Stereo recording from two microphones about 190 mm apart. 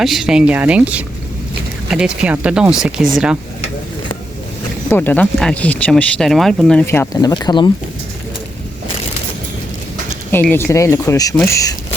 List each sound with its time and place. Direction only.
0.0 s speech: centre (ahead or behind)
4.9 s speech: 10° left (ahead or behind)
10.3 s speech: 10° left (ahead or behind)